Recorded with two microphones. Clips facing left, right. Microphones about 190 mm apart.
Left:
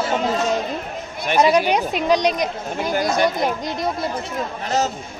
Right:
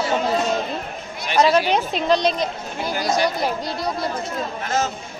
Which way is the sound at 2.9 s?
50° left (ahead or behind).